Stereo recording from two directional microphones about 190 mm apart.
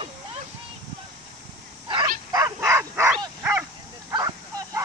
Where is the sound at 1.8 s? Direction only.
25° right (ahead or behind).